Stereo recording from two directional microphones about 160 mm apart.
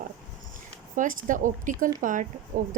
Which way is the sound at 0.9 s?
55° right (ahead or behind).